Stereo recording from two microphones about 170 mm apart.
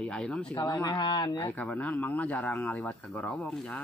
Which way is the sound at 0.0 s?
5° left (ahead or behind).